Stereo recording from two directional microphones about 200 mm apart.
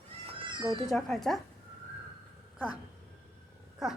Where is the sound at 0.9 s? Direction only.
Centre (ahead or behind).